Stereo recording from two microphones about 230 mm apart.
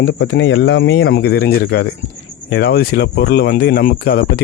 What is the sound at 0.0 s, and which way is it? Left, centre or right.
Speech, left.